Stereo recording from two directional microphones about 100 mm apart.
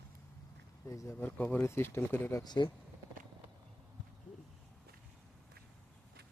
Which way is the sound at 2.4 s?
50° left (ahead or behind).